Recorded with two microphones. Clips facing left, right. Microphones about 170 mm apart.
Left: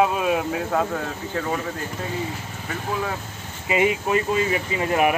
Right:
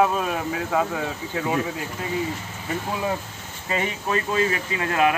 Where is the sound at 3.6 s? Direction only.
15° left (ahead or behind).